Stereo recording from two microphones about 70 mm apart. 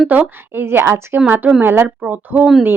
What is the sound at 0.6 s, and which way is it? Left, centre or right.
Speech, right.